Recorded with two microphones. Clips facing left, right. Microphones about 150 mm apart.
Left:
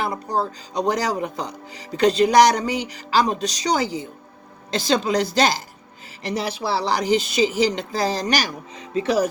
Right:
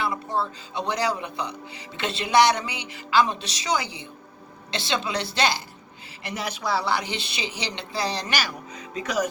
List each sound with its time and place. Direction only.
0.0 s a woman's voice: 40° left (ahead or behind)
8.7 s speech: 30° left (ahead or behind)